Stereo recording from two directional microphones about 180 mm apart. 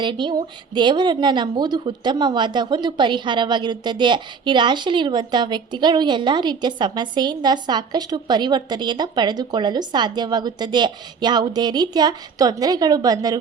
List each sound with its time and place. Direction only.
0.0 s speech: 25° right (ahead or behind)